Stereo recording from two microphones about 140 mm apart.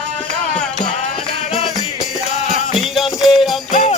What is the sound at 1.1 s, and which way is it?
Music, 45° left (ahead or behind).